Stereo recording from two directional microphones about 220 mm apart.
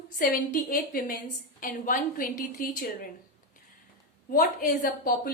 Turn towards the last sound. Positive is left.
turn(degrees=40)  # may be behind; listen again after turning